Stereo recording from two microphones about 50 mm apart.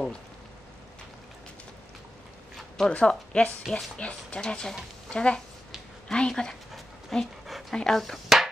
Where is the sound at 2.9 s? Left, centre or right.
Left.